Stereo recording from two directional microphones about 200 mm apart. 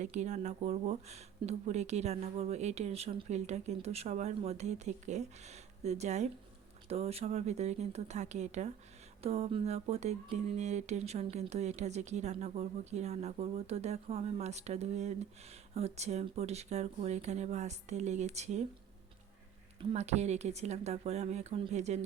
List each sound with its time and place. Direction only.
0.0 s speech: 35° right (ahead or behind)
19.8 s speech: 35° right (ahead or behind)